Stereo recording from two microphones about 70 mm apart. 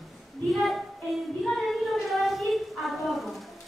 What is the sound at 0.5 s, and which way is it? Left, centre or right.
Child singing, centre.